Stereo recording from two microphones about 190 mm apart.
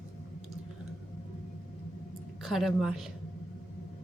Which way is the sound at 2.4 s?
Centre (ahead or behind).